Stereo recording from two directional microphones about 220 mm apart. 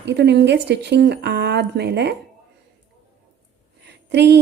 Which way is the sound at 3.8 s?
50° right (ahead or behind).